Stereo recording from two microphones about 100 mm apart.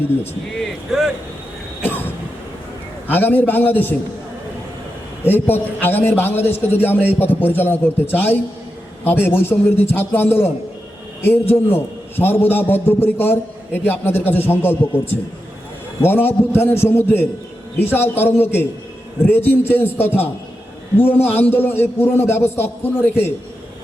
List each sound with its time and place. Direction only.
0.6 s a sound: 5° right (ahead or behind)
1.8 s train: 20° left (ahead or behind)
3.1 s a man's voice: 20° left (ahead or behind)
5.2 s a man's voice: 20° left (ahead or behind)
11.5 s a man's voice: 20° left (ahead or behind)